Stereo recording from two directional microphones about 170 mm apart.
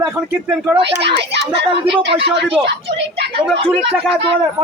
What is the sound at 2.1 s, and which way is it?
A man's voice, 30° right (ahead or behind).